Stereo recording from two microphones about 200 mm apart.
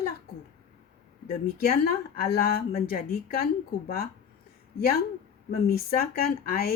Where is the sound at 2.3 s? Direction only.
50° left (ahead or behind).